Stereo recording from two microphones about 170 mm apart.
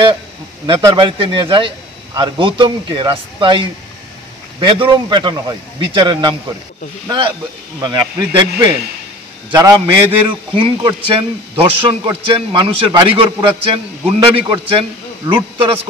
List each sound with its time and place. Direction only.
0.7 s a man's voice: 30° right (ahead or behind)